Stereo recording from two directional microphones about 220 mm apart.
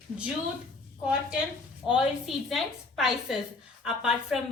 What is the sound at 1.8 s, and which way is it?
A woman's voice, 5° right (ahead or behind).